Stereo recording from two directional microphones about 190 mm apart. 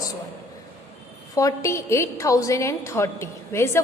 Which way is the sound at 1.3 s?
15° left (ahead or behind).